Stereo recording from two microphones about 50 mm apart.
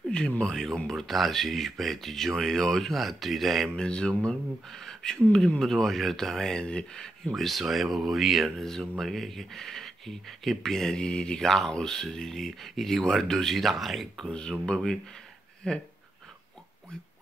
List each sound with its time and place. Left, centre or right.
0.4 s speech: centre
3.7 s speech: centre
7.3 s speech: centre
8.5 s speech: centre
14.2 s speech: centre